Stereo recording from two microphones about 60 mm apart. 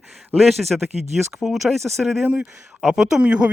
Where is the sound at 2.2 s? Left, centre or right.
Right.